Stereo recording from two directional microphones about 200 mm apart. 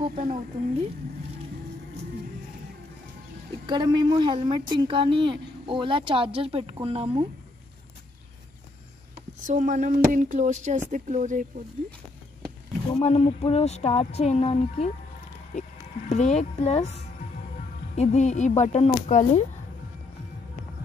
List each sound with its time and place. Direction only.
0.1 s speech: 30° right (ahead or behind)
3.6 s a woman's voice: 20° right (ahead or behind)
9.5 s speech: 40° right (ahead or behind)
13.0 s speech: 30° left (ahead or behind)
16.1 s speech: 35° left (ahead or behind)